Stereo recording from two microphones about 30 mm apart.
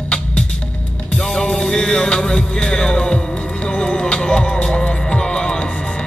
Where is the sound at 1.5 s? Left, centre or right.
Centre.